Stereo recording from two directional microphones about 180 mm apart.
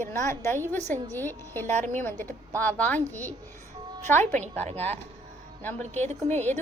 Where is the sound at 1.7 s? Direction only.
45° right (ahead or behind).